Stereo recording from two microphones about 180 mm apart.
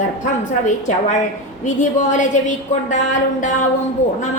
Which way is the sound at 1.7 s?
45° left (ahead or behind).